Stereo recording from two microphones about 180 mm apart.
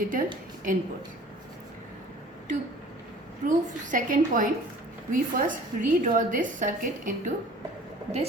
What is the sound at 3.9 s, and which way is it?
Speech, 50° right (ahead or behind).